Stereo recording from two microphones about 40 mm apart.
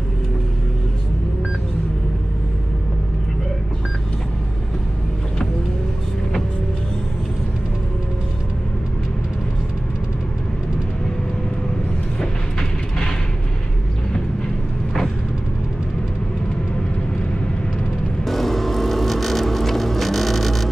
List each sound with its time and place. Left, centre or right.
12.2 s vehicle: centre
18.2 s vehicle: centre